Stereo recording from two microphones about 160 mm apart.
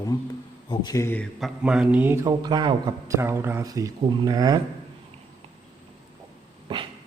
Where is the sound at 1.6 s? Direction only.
5° right (ahead or behind).